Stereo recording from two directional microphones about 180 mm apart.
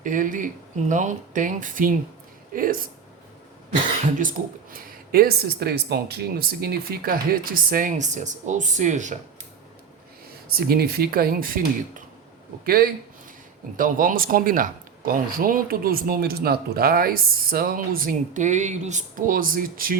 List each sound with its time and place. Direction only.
0.0 s speech: 45° right (ahead or behind)
4.2 s speech: 50° right (ahead or behind)
10.7 s speech: 60° right (ahead or behind)